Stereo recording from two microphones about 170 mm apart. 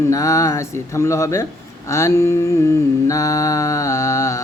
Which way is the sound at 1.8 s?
20° left (ahead or behind).